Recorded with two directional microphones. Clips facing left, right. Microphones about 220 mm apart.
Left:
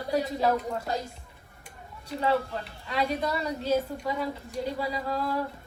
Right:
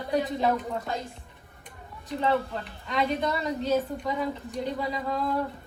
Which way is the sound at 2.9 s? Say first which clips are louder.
Right 1 dB; 5° left (ahead or behind).